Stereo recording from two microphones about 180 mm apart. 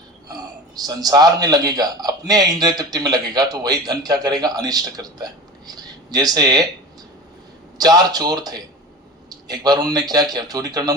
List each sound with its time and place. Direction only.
0.3 s a man's voice: 20° right (ahead or behind)
7.8 s a man's voice: 20° right (ahead or behind)